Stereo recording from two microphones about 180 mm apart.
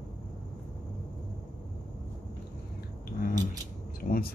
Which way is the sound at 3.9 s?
50° left (ahead or behind).